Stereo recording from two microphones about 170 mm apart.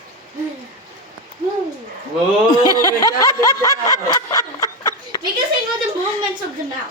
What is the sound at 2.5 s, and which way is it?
Snicker, 25° left (ahead or behind).